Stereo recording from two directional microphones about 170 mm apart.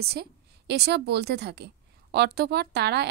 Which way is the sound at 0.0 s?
70° right (ahead or behind).